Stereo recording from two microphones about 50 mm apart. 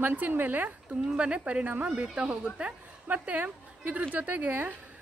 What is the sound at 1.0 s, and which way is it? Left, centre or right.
Speech, centre.